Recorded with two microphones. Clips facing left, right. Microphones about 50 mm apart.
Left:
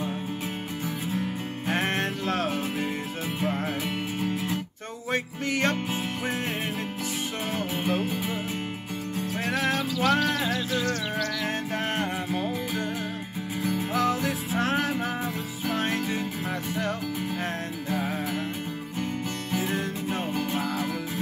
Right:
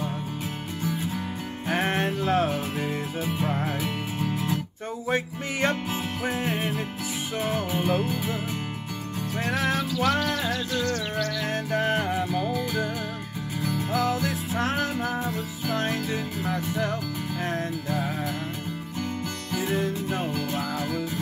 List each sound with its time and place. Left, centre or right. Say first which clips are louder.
1.7 s music: right 2 dB; centre
3.3 s music: even; centre
5.1 s music: left 1 dB; centre
5.9 s music: right 1 dB; centre
9.4 s music: right 1 dB; centre
19.5 s music: right 3 dB; centre